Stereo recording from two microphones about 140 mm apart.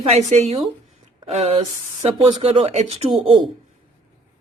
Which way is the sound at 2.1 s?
45° right (ahead or behind).